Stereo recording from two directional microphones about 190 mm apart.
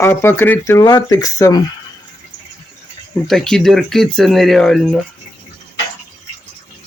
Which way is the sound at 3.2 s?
Centre (ahead or behind).